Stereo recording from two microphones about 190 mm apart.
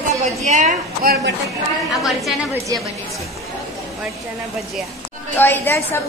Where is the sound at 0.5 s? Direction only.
40° right (ahead or behind).